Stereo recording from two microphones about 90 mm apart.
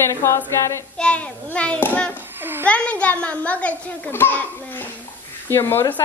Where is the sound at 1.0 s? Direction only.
15° left (ahead or behind).